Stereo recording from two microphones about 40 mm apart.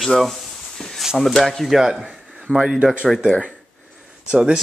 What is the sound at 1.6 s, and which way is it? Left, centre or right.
Speech, centre.